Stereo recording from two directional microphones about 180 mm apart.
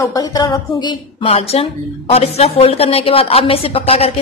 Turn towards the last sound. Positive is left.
turn(degrees=35)  # may be behind; listen again after turning